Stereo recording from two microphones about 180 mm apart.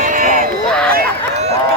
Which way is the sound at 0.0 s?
50° right (ahead or behind).